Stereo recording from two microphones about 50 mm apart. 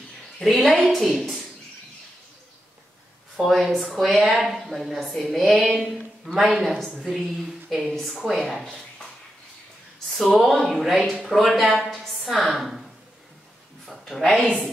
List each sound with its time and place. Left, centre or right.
0.4 s speech: centre
3.3 s speech: centre
6.8 s a woman's voice: centre
7.2 s speech: centre
7.9 s speech: centre
8.7 s a sound: centre
10.0 s a woman's voice: centre
14.2 s a woman's voice: centre